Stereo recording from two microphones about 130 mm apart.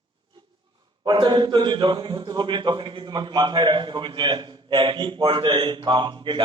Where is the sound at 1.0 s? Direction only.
35° right (ahead or behind).